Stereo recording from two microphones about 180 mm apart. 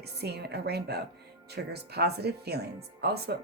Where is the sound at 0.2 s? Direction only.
65° right (ahead or behind).